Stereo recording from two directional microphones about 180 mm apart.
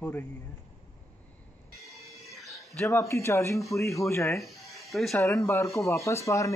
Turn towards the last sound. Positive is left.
turn(degrees=15)  # may be behind; listen again after turning